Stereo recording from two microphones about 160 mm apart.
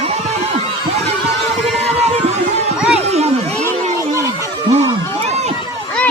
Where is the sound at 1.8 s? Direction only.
40° right (ahead or behind).